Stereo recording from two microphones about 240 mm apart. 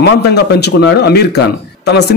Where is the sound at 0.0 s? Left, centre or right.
Left.